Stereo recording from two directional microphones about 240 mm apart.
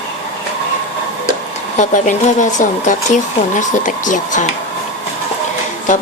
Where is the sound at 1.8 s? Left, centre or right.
Left.